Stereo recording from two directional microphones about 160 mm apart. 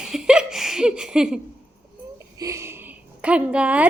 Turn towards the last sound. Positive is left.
turn(degrees=-10)  # may be behind; listen again after turning